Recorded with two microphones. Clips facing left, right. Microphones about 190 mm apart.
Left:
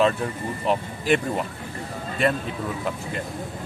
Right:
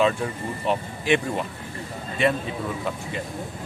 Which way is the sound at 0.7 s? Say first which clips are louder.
Left 1 dB; centre (ahead or behind).